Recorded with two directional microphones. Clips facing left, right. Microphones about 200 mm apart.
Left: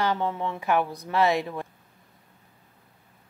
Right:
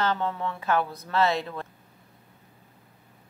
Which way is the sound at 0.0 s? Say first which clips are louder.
Left 1 dB; 15° left (ahead or behind).